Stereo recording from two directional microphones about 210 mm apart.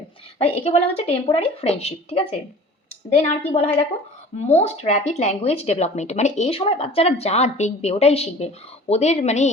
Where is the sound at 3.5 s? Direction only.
30° left (ahead or behind).